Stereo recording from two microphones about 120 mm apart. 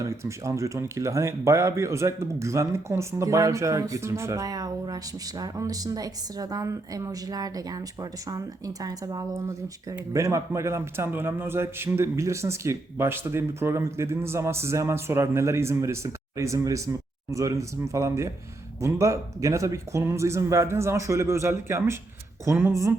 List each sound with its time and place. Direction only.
0.0 s a man's voice: 25° right (ahead or behind)